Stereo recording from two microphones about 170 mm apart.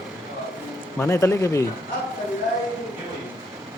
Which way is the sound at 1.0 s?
15° left (ahead or behind).